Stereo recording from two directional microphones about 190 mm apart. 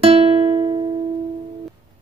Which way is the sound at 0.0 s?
30° right (ahead or behind).